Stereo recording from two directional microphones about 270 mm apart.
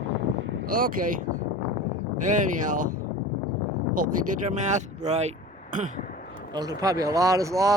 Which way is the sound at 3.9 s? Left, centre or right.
Right.